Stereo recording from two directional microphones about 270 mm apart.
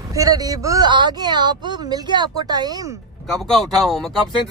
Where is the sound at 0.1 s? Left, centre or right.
Centre.